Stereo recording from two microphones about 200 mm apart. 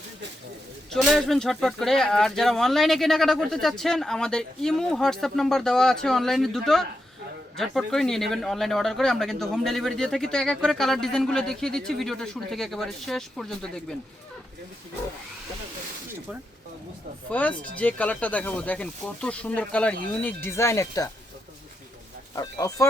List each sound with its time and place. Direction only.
0.9 s speech: centre (ahead or behind)
17.3 s speech: 10° left (ahead or behind)
22.4 s speech: 15° left (ahead or behind)